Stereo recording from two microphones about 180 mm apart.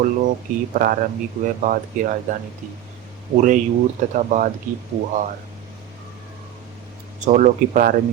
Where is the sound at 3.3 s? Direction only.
45° right (ahead or behind).